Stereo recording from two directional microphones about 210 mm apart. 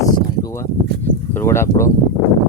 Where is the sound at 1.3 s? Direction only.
10° left (ahead or behind).